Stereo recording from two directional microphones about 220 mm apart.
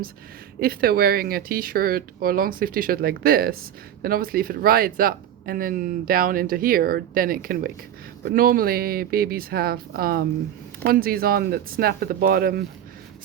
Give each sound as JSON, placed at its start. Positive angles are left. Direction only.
{"t": 0.6, "sound": "speech", "side_deg": -45}